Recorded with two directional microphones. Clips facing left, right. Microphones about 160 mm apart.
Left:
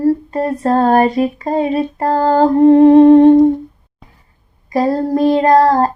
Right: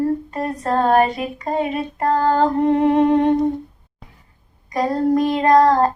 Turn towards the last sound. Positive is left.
turn(degrees=35)  # may be behind; listen again after turning